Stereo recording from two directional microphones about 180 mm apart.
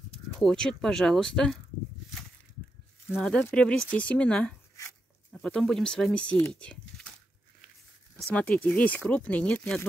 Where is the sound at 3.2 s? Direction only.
5° left (ahead or behind).